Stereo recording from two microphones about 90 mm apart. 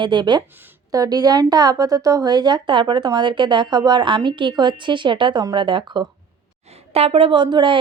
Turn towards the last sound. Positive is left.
turn(degrees=-60)  # may be behind; listen again after turning